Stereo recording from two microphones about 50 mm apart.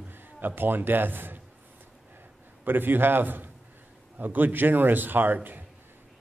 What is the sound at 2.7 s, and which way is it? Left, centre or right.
A man's voice, right.